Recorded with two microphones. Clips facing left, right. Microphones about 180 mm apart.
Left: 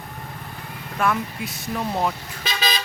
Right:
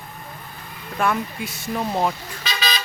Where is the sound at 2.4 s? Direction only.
50° left (ahead or behind).